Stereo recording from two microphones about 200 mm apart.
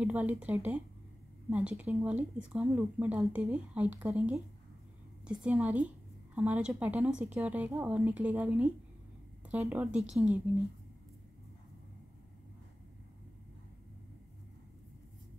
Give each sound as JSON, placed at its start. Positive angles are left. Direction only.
{"t": 0.0, "sound": "speech", "side_deg": -5}